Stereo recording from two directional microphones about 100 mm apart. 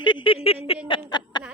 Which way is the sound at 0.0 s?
50° left (ahead or behind).